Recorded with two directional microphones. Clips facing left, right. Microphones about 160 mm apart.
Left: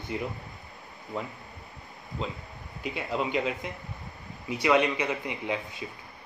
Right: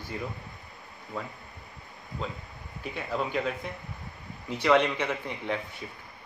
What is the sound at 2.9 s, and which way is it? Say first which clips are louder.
Speech: left 1 dB; 15° left (ahead or behind).